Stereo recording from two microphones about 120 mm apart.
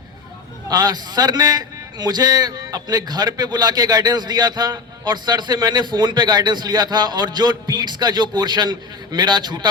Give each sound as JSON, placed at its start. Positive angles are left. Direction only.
{"t": 0.7, "sound": "a man's voice", "side_deg": -35}